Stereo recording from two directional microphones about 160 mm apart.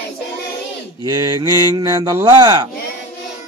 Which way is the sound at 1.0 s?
25° right (ahead or behind).